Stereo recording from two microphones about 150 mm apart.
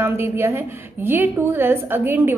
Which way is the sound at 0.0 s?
15° right (ahead or behind).